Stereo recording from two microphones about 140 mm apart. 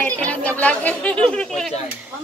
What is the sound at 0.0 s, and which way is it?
Chatter, 10° left (ahead or behind).